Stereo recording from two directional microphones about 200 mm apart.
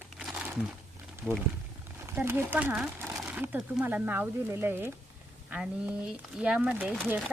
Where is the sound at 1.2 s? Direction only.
5° right (ahead or behind).